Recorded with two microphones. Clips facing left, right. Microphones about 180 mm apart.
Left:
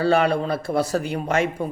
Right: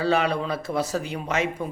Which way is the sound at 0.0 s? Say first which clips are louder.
Left 4 dB; 55° left (ahead or behind).